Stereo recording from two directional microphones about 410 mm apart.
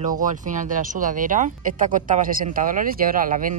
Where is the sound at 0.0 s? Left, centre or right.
Centre.